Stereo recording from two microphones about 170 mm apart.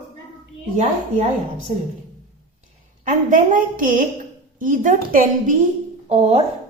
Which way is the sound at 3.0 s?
50° right (ahead or behind).